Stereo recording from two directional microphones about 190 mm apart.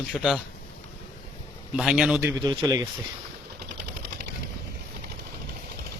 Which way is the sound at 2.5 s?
20° right (ahead or behind).